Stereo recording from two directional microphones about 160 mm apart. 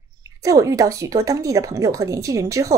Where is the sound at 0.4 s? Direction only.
20° right (ahead or behind).